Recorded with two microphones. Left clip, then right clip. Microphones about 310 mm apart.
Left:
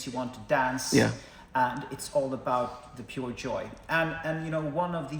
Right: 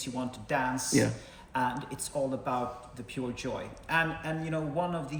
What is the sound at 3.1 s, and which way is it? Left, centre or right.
A man's voice, centre.